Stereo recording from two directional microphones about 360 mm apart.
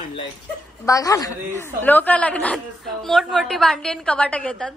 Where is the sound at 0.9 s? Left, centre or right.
Centre.